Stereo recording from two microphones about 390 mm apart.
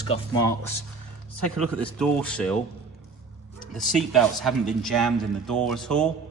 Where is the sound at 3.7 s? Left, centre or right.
Centre.